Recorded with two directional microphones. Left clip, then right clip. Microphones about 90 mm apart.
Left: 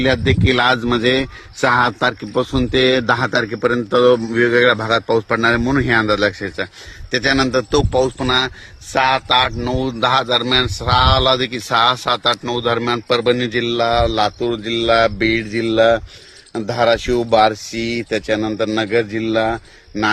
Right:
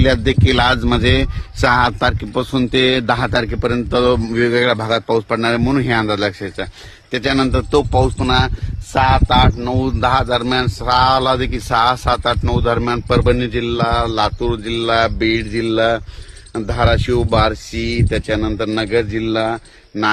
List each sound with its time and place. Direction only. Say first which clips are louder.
0.0 s a man's voice: right 1 dB; 90° right; by 19.5 s 5° right (ahead or behind)